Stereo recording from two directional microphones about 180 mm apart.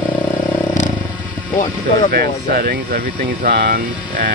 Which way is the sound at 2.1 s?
60° right (ahead or behind).